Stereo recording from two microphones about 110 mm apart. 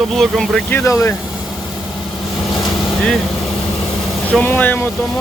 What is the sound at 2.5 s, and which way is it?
Vehicle, 5° left (ahead or behind).